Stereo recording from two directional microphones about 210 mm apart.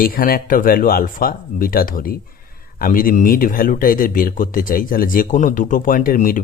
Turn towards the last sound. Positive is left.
turn(degrees=40)  # may be behind; listen again after turning